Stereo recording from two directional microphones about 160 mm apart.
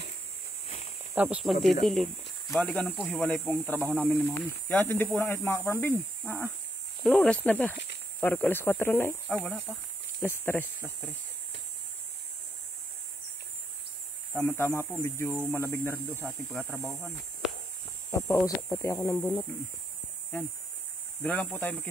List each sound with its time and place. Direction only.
1.1 s speech: 10° right (ahead or behind); by 10.7 s 15° left (ahead or behind)
14.3 s speech: 10° left (ahead or behind)
16.7 s speech: centre (ahead or behind)
18.1 s speech: 20° left (ahead or behind)
21.2 s speech: 10° left (ahead or behind)